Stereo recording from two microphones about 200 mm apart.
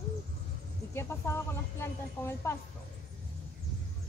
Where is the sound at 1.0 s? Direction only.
10° left (ahead or behind).